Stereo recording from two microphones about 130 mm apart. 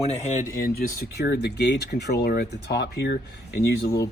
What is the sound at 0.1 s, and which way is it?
Speech, 65° left (ahead or behind).